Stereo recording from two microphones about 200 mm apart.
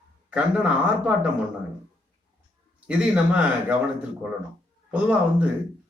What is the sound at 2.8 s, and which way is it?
Speech, 5° right (ahead or behind).